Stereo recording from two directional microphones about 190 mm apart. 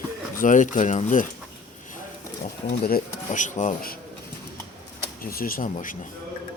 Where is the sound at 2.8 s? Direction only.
45° left (ahead or behind).